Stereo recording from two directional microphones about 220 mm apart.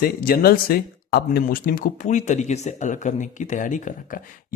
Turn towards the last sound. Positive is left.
turn(degrees=35)  # may be behind; listen again after turning